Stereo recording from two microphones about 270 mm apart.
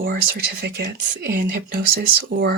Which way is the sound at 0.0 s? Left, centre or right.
Right.